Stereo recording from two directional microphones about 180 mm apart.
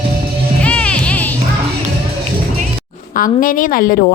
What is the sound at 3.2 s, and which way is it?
Speech, 50° left (ahead or behind).